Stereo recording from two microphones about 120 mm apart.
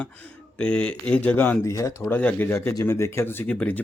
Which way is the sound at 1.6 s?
25° left (ahead or behind).